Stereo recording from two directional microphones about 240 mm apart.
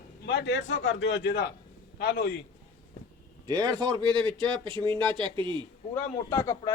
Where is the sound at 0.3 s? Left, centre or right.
Left.